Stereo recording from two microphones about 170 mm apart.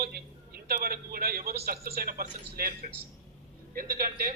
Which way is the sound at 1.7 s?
60° right (ahead or behind).